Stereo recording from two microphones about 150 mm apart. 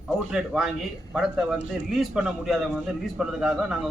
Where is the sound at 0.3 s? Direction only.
5° right (ahead or behind).